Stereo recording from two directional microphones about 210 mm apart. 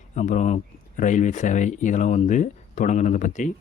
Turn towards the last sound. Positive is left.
turn(degrees=35)  # may be behind; listen again after turning